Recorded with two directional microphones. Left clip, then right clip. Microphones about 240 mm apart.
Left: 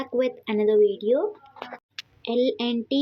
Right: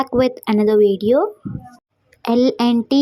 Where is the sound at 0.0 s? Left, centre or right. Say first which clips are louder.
Right 8 dB; right.